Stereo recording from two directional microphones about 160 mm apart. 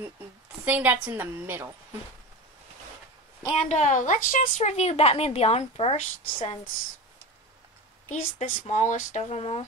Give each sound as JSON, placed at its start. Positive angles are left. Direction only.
{"t": 0.7, "sound": "a woman's voice", "side_deg": -10}
{"t": 3.5, "sound": "a woman's voice", "side_deg": 50}
{"t": 8.1, "sound": "a woman's voice", "side_deg": 50}